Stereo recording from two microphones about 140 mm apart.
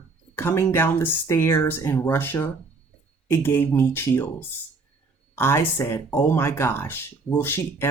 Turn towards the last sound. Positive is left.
turn(degrees=15)  # may be behind; listen again after turning